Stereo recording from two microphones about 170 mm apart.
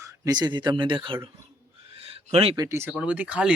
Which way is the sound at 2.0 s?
35° right (ahead or behind).